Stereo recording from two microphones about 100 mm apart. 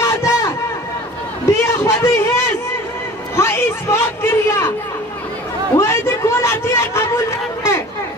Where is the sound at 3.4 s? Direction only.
25° left (ahead or behind).